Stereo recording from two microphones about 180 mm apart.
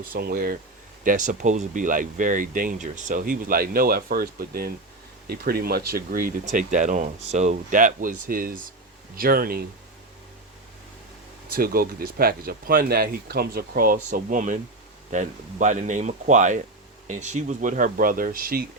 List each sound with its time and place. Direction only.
0.1 s speech: 55° right (ahead or behind)
1.0 s speech: 45° right (ahead or behind)
11.5 s speech: 55° right (ahead or behind)